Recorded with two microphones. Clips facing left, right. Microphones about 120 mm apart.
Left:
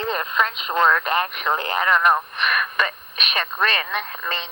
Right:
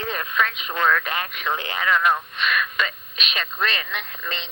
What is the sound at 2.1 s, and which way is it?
Speech, 55° left (ahead or behind).